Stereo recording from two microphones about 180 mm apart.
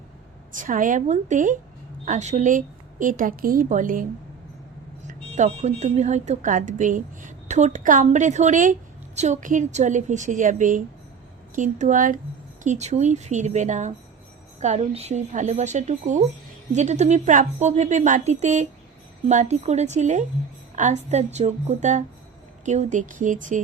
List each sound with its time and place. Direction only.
0.5 s speech: 50° right (ahead or behind)
5.0 s a woman's voice: 40° right (ahead or behind)